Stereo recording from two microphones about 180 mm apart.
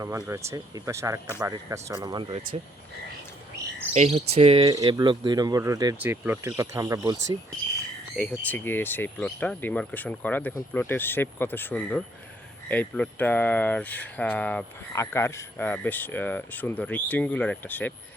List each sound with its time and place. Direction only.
0.0 s speech: 15° right (ahead or behind)
2.0 s speech: 25° right (ahead or behind)
3.9 s cricket: 35° right (ahead or behind)
4.7 s speech: 25° right (ahead or behind)
8.1 s speech: 5° left (ahead or behind)